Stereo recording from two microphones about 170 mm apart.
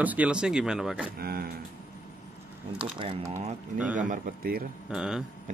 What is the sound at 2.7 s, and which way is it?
Speech, 30° right (ahead or behind).